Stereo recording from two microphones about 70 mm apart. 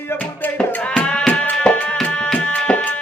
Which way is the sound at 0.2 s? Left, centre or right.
Left.